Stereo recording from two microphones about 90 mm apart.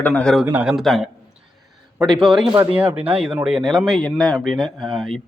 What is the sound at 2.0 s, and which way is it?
A man's voice, centre (ahead or behind).